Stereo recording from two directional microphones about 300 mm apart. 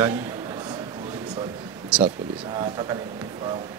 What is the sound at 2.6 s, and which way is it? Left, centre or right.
Speech, centre.